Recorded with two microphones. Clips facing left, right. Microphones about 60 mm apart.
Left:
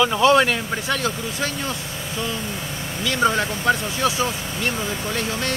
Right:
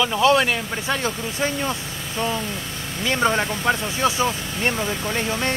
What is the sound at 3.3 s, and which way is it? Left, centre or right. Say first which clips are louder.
Speech: left 1 dB; centre.